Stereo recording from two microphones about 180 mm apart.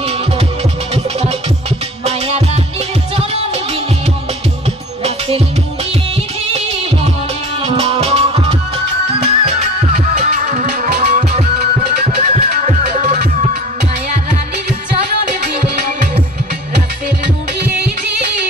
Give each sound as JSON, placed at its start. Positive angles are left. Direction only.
{"t": 2.0, "sound": "music", "side_deg": -35}
{"t": 7.6, "sound": "music", "side_deg": -30}
{"t": 10.7, "sound": "music", "side_deg": -55}
{"t": 15.4, "sound": "music", "side_deg": -45}